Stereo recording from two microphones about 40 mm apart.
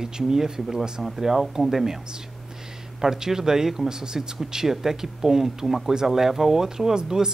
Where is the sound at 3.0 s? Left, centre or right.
Centre.